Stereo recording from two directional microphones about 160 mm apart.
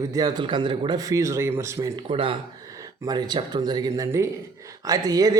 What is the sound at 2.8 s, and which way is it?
Speech, 25° right (ahead or behind).